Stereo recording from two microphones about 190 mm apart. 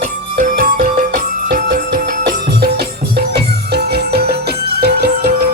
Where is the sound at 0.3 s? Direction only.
45° right (ahead or behind).